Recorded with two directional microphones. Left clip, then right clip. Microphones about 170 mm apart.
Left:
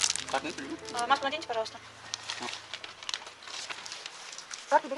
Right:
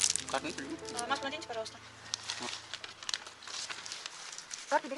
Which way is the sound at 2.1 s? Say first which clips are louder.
Left 2 dB; 5° right (ahead or behind).